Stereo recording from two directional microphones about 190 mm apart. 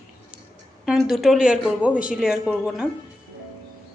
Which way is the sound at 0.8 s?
Centre (ahead or behind).